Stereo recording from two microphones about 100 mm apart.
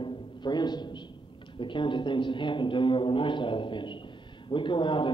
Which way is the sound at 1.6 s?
55° left (ahead or behind).